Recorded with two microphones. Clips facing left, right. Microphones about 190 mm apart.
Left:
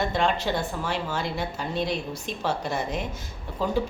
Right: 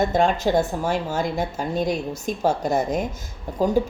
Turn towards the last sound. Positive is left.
turn(degrees=-40)  # may be behind; listen again after turning